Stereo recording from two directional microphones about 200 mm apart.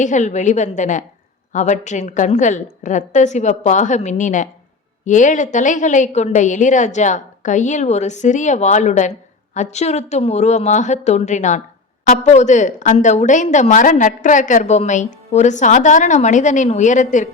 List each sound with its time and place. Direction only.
0.0 s a woman's voice: 40° left (ahead or behind)